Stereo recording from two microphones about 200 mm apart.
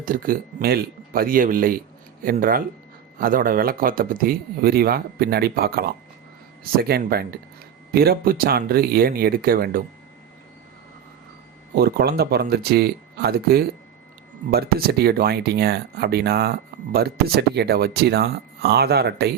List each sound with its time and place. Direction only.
0.0 s speech: 45° right (ahead or behind)
11.7 s speech: 50° right (ahead or behind)